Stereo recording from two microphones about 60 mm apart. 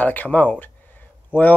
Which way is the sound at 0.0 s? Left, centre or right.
Left.